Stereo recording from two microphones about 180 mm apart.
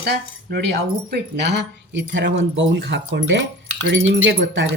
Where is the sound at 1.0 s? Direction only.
70° right (ahead or behind).